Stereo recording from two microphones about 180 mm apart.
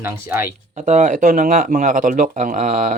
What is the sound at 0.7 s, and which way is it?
Speech, 45° right (ahead or behind).